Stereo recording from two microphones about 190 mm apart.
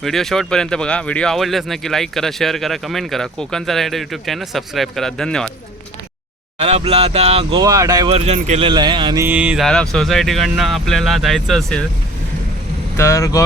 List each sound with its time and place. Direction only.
0.0 s speech: centre (ahead or behind)
6.6 s speech: 35° right (ahead or behind)
7.6 s speech: 20° right (ahead or behind)
8.1 s speech: 35° right (ahead or behind)
9.2 s speech: 10° right (ahead or behind)
13.0 s speech: 15° left (ahead or behind)